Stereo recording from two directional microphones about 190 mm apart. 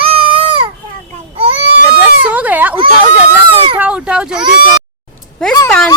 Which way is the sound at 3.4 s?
25° right (ahead or behind).